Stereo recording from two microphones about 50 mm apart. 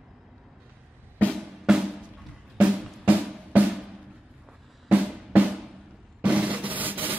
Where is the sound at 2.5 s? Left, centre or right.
Right.